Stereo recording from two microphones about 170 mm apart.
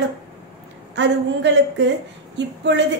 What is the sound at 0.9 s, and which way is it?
A woman's voice, 90° right.